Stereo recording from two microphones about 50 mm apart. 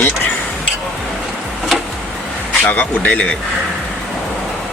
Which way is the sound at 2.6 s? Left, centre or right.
Left.